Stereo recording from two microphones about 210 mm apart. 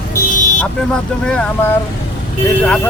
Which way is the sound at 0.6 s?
5° left (ahead or behind).